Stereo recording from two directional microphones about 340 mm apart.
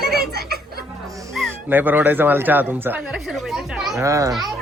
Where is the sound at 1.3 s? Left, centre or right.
Centre.